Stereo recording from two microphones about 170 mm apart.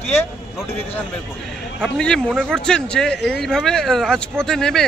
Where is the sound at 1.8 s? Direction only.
5° left (ahead or behind).